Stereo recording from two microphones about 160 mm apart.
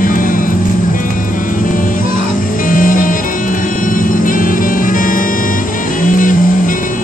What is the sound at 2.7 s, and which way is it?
Music, 60° left (ahead or behind).